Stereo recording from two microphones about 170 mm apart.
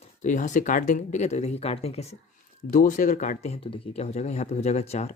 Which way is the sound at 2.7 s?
50° left (ahead or behind).